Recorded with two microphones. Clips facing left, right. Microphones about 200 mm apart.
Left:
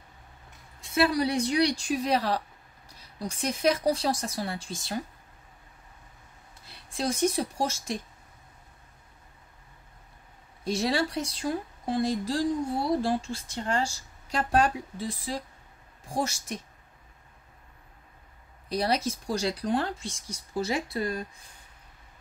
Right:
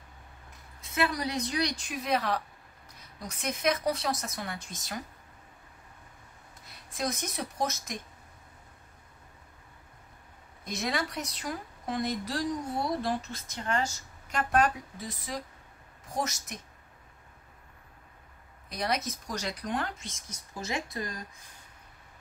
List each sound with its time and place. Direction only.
0.7 s speech: 30° left (ahead or behind)
6.6 s speech: 30° left (ahead or behind)
10.6 s speech: 30° left (ahead or behind)
18.7 s speech: 30° left (ahead or behind)